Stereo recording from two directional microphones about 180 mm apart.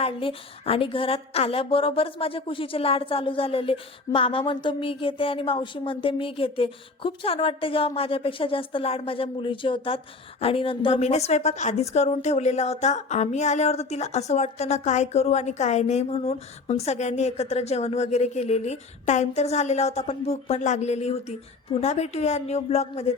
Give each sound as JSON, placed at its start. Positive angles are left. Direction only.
{"t": 0.0, "sound": "a woman's voice", "side_deg": 30}